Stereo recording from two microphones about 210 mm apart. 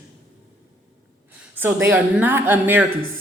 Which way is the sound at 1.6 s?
10° right (ahead or behind).